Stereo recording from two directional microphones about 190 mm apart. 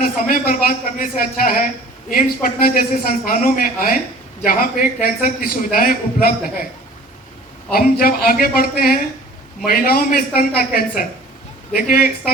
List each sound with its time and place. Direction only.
0.0 s a man's voice: 50° left (ahead or behind)
7.7 s a man's voice: 55° left (ahead or behind)